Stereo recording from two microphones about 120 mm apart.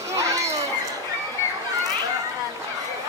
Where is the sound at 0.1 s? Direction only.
25° right (ahead or behind).